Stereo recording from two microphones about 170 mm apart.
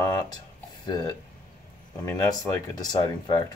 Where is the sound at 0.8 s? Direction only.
25° left (ahead or behind).